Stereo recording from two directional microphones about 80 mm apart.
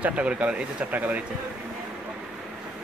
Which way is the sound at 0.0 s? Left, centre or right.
Centre.